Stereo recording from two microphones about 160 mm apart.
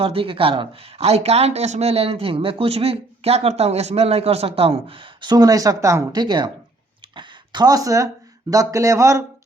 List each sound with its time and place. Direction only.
0.0 s speech: 35° right (ahead or behind); by 9.2 s 20° right (ahead or behind)